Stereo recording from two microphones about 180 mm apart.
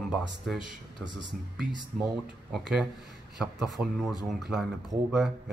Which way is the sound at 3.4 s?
Centre (ahead or behind).